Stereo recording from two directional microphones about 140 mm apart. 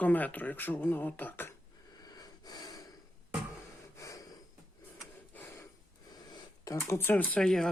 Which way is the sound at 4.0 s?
25° left (ahead or behind).